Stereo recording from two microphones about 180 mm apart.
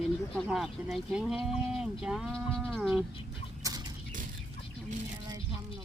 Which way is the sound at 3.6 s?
20° right (ahead or behind).